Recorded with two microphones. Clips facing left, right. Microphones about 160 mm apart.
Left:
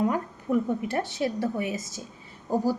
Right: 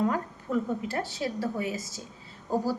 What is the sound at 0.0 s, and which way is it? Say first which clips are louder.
A woman's voice: left 2 dB; 15° left (ahead or behind).